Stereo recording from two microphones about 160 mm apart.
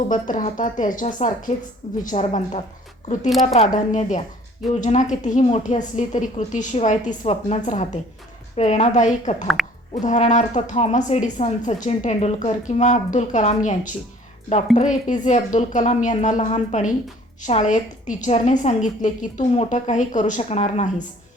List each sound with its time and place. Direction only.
0.1 s speech: 55° left (ahead or behind)